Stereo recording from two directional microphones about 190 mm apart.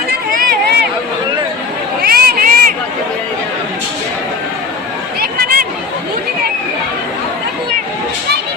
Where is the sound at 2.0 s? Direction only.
55° right (ahead or behind).